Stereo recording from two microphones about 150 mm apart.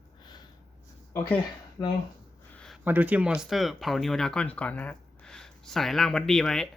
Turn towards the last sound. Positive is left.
turn(degrees=5)  # may be behind; listen again after turning